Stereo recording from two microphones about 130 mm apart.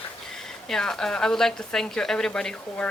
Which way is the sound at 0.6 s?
5° left (ahead or behind).